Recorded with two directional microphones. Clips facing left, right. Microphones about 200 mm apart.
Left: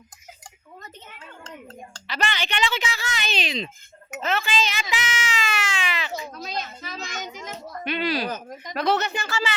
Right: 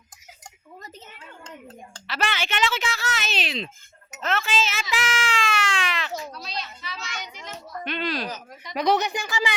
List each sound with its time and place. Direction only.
1.6 s a woman's voice: 5° right (ahead or behind)
4.2 s a sound: centre (ahead or behind)
6.3 s children playing: 45° left (ahead or behind)
7.9 s a woman's voice: 5° left (ahead or behind)
8.3 s speech: 45° left (ahead or behind)
8.7 s speech: 15° right (ahead or behind)